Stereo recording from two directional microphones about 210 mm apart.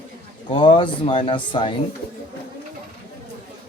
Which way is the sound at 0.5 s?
25° left (ahead or behind).